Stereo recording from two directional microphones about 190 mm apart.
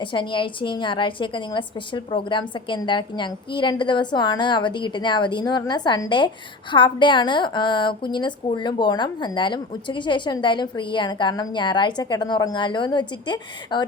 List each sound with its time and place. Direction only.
0.0 s a woman's voice: 25° left (ahead or behind)